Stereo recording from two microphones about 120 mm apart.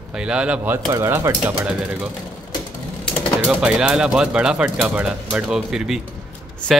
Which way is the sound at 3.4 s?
5° right (ahead or behind).